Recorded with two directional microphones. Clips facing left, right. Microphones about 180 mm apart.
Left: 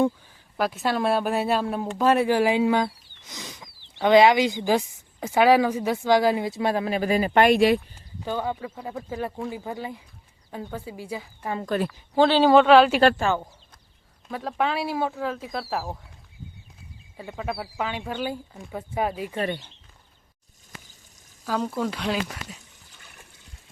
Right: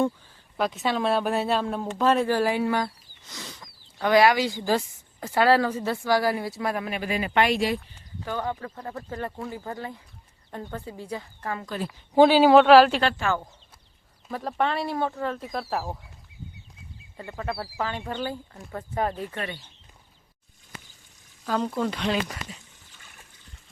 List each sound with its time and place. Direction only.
0.5 s speech: 5° left (ahead or behind); by 7.8 s 60° left (ahead or behind)
8.4 s speech: 10° left (ahead or behind)
11.6 s a woman's voice: 60° left (ahead or behind)
11.9 s speech: 15° right (ahead or behind)
13.0 s speech: 40° left (ahead or behind)
13.2 s speech: 15° left (ahead or behind)
14.3 s speech: centre (ahead or behind)
17.2 s speech: 5° left (ahead or behind)
21.4 s speech: 5° left (ahead or behind)